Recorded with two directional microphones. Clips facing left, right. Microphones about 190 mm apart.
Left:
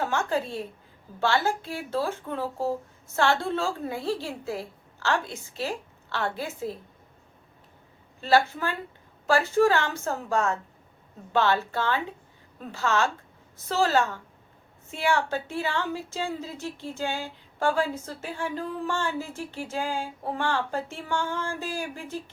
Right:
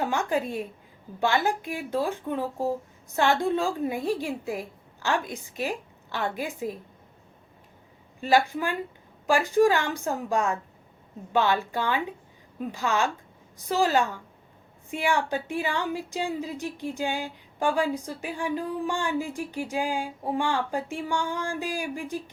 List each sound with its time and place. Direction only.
0.0 s speech: 15° right (ahead or behind)
8.2 s speech: 15° right (ahead or behind)